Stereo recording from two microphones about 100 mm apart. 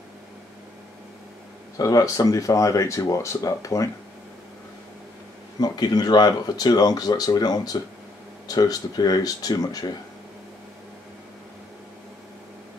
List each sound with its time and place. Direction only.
1.8 s speech: 35° left (ahead or behind)
5.6 s speech: 45° left (ahead or behind)